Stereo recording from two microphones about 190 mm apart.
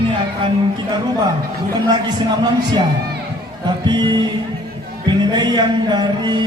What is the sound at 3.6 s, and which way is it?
Speech, 25° right (ahead or behind).